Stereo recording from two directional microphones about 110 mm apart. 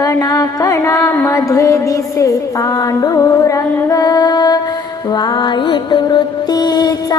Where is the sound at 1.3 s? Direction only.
30° left (ahead or behind).